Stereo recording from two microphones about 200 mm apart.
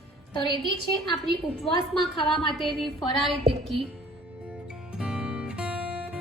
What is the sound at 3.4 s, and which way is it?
Music, 30° right (ahead or behind).